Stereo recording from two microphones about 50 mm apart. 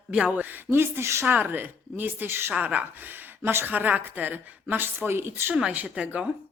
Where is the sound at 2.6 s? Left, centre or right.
Right.